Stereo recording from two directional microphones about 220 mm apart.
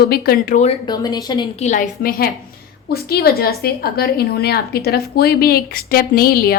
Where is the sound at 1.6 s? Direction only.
35° left (ahead or behind).